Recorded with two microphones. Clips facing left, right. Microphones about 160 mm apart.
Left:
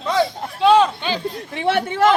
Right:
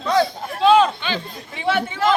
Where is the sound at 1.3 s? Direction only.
60° left (ahead or behind).